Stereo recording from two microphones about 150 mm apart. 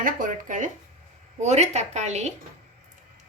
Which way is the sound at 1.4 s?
50° right (ahead or behind).